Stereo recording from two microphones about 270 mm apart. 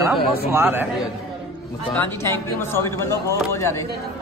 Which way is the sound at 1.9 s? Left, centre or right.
Centre.